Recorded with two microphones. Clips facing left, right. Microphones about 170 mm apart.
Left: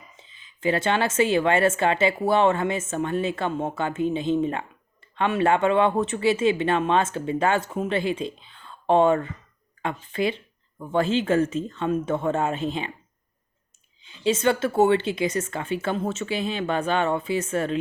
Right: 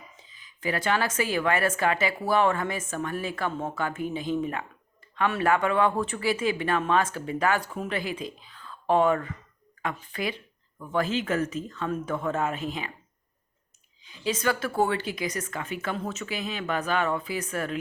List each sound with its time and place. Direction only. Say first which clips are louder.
0.2 s a woman's voice: left 7 dB; 25° left (ahead or behind)
14.0 s a woman's voice: left 6 dB; 25° left (ahead or behind)